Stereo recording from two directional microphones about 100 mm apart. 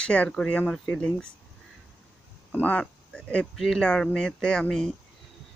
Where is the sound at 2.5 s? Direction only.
15° left (ahead or behind).